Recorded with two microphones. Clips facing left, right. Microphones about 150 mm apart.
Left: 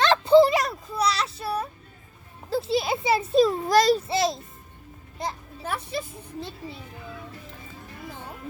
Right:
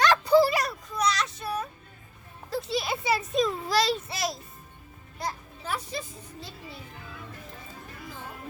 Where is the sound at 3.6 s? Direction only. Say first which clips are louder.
Left 6 dB; 45° left (ahead or behind).